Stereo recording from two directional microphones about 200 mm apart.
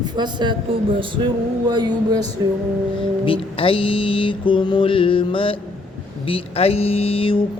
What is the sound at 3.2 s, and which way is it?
Mantra, 25° left (ahead or behind).